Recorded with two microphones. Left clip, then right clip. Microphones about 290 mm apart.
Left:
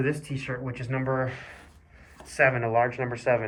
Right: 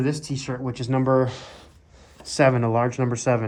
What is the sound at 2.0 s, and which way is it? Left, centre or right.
Speech, right.